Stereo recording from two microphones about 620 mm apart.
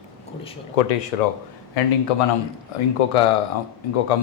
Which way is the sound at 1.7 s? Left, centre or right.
Left.